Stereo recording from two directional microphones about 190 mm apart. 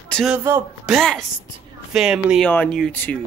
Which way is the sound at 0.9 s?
Centre (ahead or behind).